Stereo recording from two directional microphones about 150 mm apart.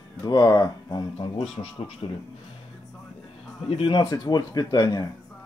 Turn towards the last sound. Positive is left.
turn(degrees=25)  # may be behind; listen again after turning